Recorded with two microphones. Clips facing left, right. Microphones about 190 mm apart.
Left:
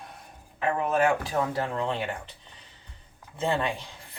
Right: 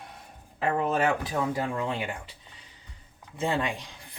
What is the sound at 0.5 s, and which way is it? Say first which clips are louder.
Speech: even; 30° right (ahead or behind).